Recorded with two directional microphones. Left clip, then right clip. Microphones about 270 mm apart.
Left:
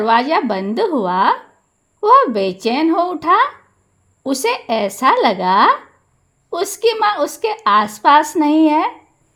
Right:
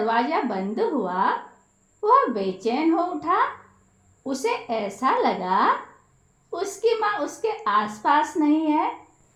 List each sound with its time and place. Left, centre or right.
0.0 s a woman's voice: left